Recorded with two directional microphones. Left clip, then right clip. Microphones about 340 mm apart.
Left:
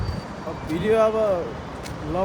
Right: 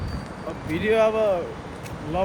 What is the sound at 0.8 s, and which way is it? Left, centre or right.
Speech, centre.